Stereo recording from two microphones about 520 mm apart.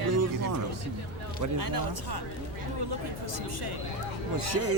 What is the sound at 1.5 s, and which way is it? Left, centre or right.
Speech, right.